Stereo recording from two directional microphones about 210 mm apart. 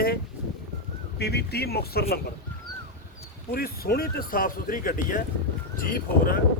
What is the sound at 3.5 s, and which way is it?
Speech, 45° left (ahead or behind).